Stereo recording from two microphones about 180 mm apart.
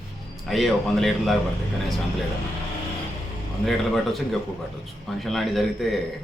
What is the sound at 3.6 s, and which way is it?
A man's voice, centre (ahead or behind).